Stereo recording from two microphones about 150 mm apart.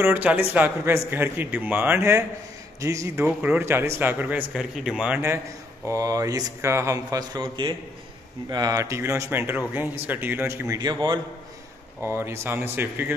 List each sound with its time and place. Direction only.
0.0 s speech: 10° right (ahead or behind)
5.9 s speech: 25° right (ahead or behind)
12.0 s speech: 15° right (ahead or behind)